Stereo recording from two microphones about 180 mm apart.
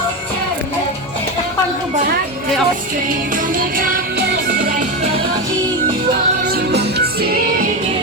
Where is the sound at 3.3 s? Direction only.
50° right (ahead or behind).